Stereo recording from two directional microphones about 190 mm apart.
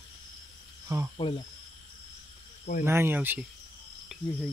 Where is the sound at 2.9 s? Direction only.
10° right (ahead or behind).